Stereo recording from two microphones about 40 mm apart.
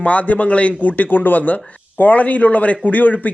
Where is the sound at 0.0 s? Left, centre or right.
Left.